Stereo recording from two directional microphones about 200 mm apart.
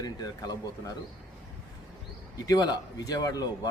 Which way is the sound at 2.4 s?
20° left (ahead or behind).